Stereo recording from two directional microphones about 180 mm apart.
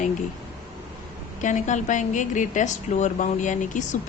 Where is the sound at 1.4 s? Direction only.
45° left (ahead or behind).